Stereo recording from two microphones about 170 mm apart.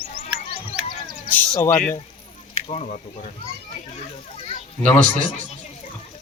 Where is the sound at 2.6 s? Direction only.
40° left (ahead or behind).